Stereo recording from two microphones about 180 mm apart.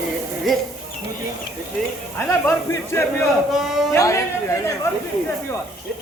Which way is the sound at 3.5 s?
Centre (ahead or behind).